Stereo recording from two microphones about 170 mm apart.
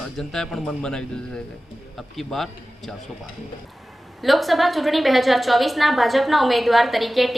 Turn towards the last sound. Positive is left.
turn(degrees=0)  # may be behind; listen again after turning